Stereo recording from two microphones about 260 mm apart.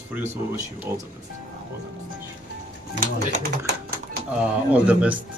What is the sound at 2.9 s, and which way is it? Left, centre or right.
Speech, right.